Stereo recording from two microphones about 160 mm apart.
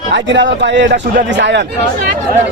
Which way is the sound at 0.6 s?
90° right.